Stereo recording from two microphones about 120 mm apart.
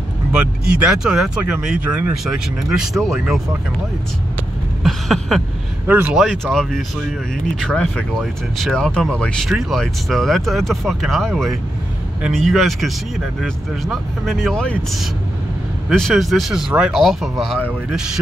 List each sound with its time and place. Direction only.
0.3 s speech: 10° right (ahead or behind)
4.8 s a sound: centre (ahead or behind)
5.9 s speech: 15° right (ahead or behind)
6.1 s speech: 5° left (ahead or behind)
15.9 s speech: centre (ahead or behind)